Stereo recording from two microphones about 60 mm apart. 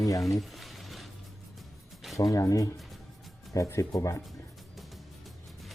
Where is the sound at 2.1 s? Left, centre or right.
Left.